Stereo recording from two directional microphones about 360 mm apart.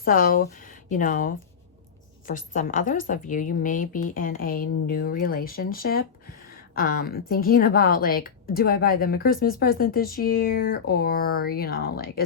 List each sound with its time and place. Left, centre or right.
0.0 s a woman's voice: left